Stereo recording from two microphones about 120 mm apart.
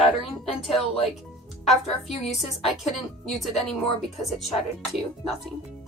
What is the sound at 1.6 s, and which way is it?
A woman's voice, centre (ahead or behind).